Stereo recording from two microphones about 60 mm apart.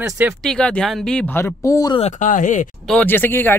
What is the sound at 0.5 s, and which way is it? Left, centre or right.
Speech, centre.